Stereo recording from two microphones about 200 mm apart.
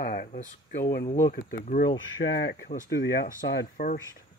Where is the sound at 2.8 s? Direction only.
50° left (ahead or behind).